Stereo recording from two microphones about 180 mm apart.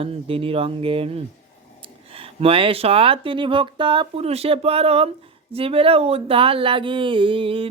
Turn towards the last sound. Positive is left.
turn(degrees=-30)  # may be behind; listen again after turning